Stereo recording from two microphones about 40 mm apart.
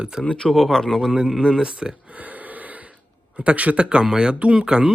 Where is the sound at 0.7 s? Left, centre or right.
Centre.